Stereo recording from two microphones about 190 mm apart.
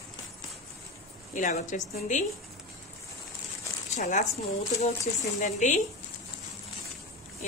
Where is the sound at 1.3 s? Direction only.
35° left (ahead or behind).